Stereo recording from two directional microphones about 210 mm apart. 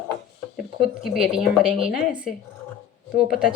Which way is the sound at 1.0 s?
Centre (ahead or behind).